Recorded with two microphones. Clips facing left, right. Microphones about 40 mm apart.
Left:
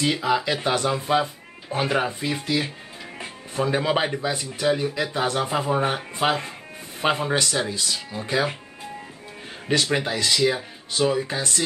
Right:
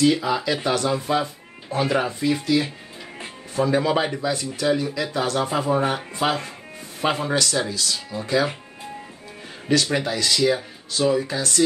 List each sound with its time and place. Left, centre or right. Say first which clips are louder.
0.0 s speech: right 2 dB; left
3.5 s speech: right 2 dB; left
9.7 s speech: right 1 dB; centre